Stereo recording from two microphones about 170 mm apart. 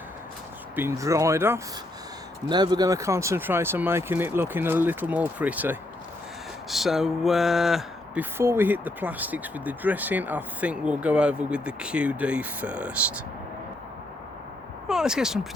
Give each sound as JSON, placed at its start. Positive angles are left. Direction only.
{"t": 0.8, "sound": "speech", "side_deg": -15}
{"t": 14.8, "sound": "speech", "side_deg": -5}